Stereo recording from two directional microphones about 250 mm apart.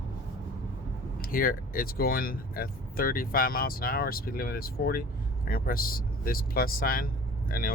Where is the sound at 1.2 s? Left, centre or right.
Left.